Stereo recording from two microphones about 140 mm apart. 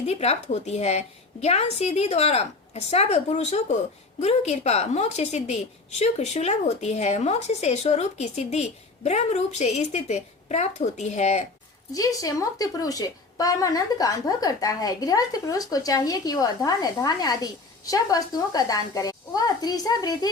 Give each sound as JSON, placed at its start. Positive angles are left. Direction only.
{"t": 0.0, "sound": "a woman's voice", "side_deg": 50}
{"t": 11.9, "sound": "a woman's voice", "side_deg": 25}